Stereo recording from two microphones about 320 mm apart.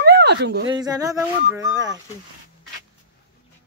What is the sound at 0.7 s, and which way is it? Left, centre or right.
Speech, centre.